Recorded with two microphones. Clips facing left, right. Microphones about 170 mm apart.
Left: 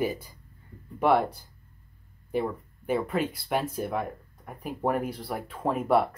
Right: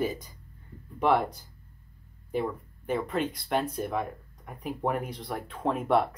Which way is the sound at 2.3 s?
5° left (ahead or behind).